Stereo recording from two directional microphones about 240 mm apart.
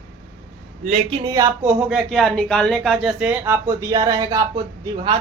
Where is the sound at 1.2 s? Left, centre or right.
Centre.